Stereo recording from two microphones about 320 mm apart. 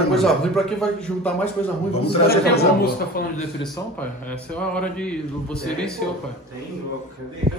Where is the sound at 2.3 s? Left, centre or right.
Left.